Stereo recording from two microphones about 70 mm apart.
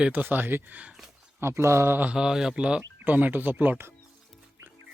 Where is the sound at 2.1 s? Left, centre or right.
Centre.